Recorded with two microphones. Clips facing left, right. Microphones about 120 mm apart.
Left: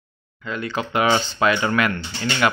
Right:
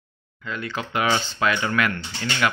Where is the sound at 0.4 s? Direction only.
25° left (ahead or behind).